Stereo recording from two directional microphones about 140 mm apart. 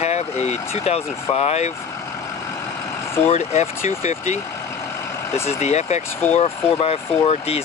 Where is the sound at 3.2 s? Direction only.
50° left (ahead or behind).